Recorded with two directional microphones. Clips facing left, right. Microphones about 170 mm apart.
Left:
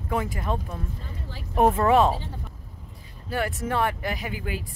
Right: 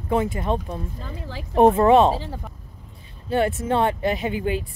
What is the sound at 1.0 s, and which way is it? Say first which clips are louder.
Speech: right 5 dB; 90° right.